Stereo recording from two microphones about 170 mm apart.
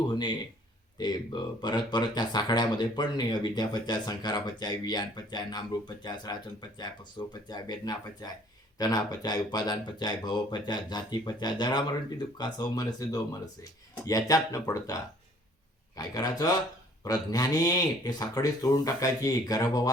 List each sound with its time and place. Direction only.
0.1 s a sound: 25° left (ahead or behind)
0.9 s speech: 25° left (ahead or behind)
16.0 s speech: 20° left (ahead or behind)